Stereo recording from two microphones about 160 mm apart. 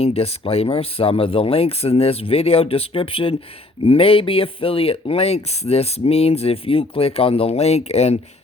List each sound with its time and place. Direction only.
0.0 s speech: 40° left (ahead or behind)